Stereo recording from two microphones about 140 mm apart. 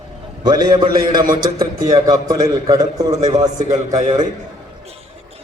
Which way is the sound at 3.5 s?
65° right (ahead or behind).